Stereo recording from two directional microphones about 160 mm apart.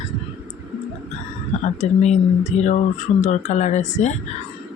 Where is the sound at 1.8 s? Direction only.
45° left (ahead or behind).